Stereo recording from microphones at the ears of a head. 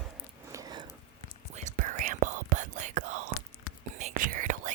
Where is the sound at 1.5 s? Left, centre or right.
Right.